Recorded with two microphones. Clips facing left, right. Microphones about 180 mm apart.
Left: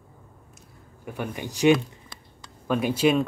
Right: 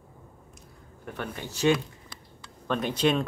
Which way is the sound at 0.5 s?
10° left (ahead or behind).